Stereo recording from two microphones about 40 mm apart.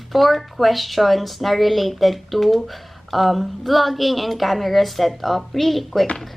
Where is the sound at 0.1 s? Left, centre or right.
Centre.